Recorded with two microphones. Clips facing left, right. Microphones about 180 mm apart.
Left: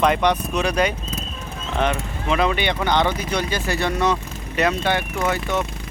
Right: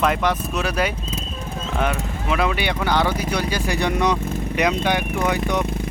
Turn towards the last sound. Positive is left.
turn(degrees=-15)  # may be behind; listen again after turning